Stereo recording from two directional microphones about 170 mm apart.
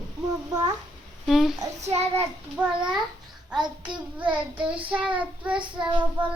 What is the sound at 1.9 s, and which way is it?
Child singing, 10° right (ahead or behind).